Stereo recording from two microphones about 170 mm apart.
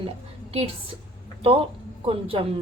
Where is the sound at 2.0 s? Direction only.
35° right (ahead or behind).